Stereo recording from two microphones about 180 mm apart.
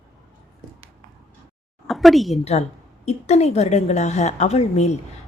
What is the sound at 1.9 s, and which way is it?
Speech, centre (ahead or behind).